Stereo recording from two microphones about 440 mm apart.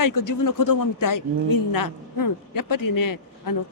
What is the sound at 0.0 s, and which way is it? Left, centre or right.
A woman's voice, left.